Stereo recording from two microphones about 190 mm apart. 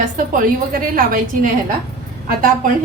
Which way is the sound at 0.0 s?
45° right (ahead or behind).